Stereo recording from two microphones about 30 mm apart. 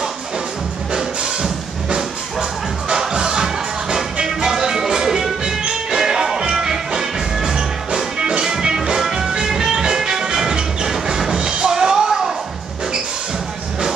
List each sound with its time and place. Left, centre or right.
2.9 s music: right
5.9 s music: centre
11.3 s music: right
11.7 s music: right